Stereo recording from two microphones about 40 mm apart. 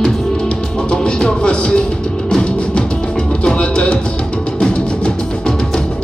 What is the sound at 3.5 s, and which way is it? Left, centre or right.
Music, left.